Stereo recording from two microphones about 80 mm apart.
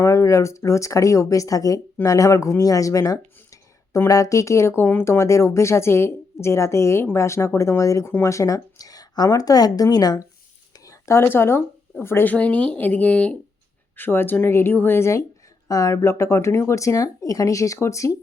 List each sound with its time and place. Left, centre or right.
0.0 s speech: left
10.8 s speech: left; by 13.3 s centre
13.9 s speech: left